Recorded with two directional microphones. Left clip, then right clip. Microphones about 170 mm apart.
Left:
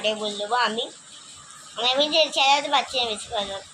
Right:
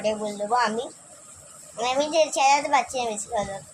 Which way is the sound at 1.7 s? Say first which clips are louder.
Left 2 dB; 10° right (ahead or behind).